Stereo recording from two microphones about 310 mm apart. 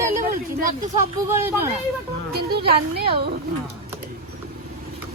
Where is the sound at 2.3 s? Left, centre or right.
Right.